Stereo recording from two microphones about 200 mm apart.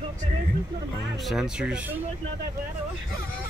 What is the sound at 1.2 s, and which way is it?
Speech, centre (ahead or behind).